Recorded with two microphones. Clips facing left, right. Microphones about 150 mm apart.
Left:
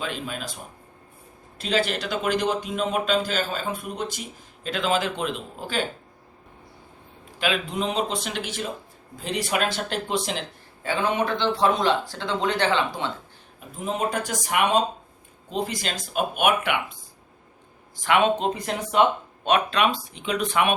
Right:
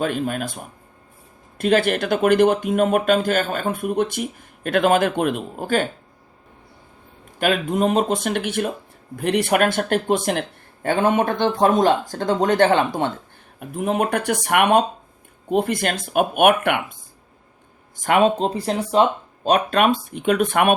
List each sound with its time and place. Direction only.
0.0 s speech: 50° right (ahead or behind)
7.3 s speech: 50° right (ahead or behind)
13.6 s speech: 60° right (ahead or behind)
17.9 s speech: 45° right (ahead or behind)